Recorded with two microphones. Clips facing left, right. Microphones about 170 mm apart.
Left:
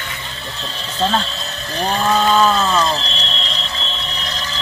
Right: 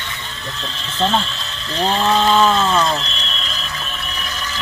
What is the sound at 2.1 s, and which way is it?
Ratchet, 5° left (ahead or behind).